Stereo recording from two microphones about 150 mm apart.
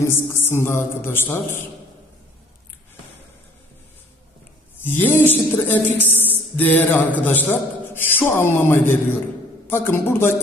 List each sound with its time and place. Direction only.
0.0 s speech: 15° left (ahead or behind)
4.8 s speech: 15° left (ahead or behind)